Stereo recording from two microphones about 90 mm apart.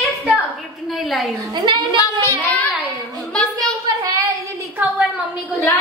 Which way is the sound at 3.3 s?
5° left (ahead or behind).